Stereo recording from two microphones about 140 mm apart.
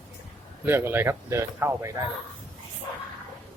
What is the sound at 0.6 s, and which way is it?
Speech, 15° right (ahead or behind).